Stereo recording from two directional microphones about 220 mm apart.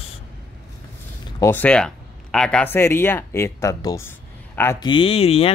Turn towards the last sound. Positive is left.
turn(degrees=25)  # may be behind; listen again after turning